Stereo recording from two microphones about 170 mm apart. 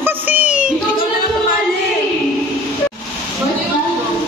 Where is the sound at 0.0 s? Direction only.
10° right (ahead or behind).